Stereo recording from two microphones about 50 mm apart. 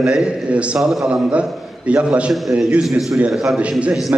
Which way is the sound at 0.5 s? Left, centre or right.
Right.